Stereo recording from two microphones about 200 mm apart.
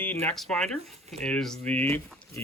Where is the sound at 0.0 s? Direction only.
10° left (ahead or behind).